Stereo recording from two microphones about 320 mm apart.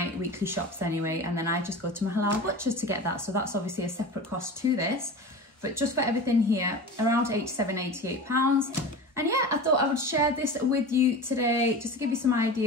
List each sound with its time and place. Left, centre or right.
0.4 s speech: centre